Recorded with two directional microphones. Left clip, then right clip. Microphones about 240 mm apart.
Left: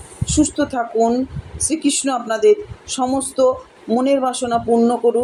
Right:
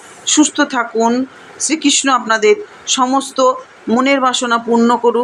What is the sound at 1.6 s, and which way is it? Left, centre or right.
Speech, centre.